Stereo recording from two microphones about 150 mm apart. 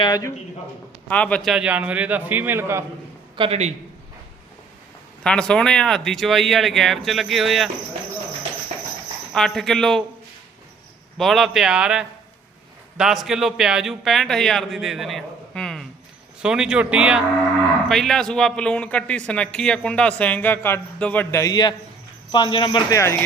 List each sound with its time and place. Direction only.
0.0 s a man's voice: 25° left (ahead or behind)
1.0 s a man's voice: 10° left (ahead or behind); by 2.8 s 15° right (ahead or behind)
3.3 s a man's voice: 40° right (ahead or behind)
5.2 s a man's voice: 5° left (ahead or behind)
9.3 s a man's voice: 5° left (ahead or behind)
11.2 s a man's voice: centre (ahead or behind); by 23.0 s 30° left (ahead or behind)